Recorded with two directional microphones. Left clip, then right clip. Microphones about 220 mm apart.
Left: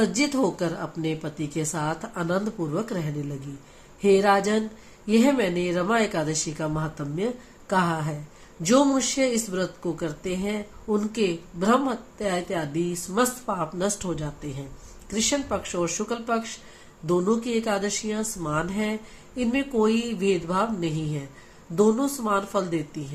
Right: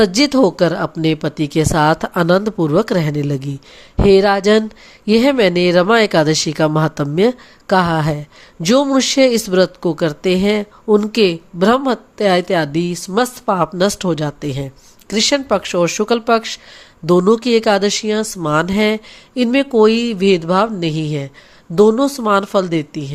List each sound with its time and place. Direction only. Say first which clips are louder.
0.0 s speech: right 11 dB; 45° right (ahead or behind)